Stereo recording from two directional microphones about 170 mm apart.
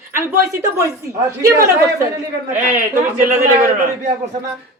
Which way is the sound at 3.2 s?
50° right (ahead or behind).